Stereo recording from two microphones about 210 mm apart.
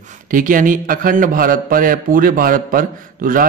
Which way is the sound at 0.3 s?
40° right (ahead or behind).